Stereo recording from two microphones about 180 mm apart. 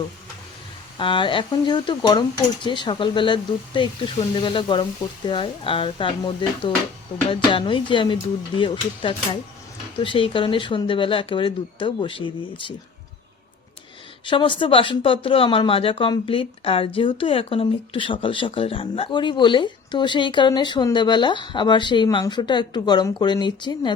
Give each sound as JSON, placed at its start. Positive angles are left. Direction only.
{"t": 0.9, "sound": "speech", "side_deg": 30}
{"t": 14.3, "sound": "speech", "side_deg": 30}